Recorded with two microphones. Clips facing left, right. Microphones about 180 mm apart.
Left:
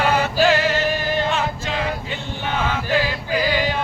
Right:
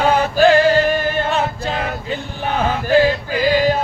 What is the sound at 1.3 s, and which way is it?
Male singing, 35° right (ahead or behind).